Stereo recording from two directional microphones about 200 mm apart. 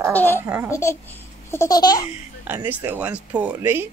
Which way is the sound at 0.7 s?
15° left (ahead or behind).